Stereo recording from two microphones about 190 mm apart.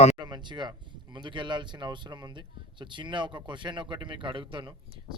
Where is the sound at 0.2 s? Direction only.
25° right (ahead or behind).